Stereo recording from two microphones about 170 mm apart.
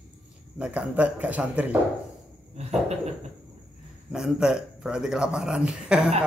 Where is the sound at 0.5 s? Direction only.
5° right (ahead or behind).